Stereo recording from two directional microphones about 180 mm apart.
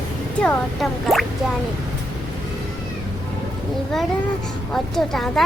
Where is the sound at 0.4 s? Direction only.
5° left (ahead or behind).